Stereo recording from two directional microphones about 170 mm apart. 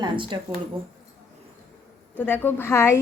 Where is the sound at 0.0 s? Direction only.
25° right (ahead or behind).